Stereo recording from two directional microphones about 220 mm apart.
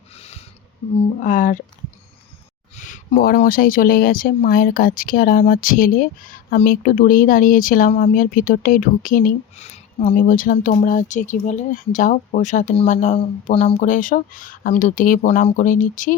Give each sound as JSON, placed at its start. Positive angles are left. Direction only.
{"t": 0.1, "sound": "a sound", "side_deg": 30}
{"t": 1.2, "sound": "speech", "side_deg": 35}
{"t": 2.7, "sound": "speech", "side_deg": 35}